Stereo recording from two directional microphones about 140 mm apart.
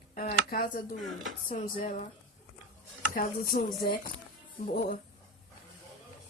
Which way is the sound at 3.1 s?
90° left.